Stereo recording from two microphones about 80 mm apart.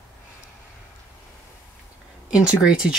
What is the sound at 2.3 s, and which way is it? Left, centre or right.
Speech, centre.